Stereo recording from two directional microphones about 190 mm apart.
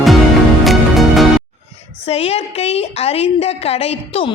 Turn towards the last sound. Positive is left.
turn(degrees=30)  # may be behind; listen again after turning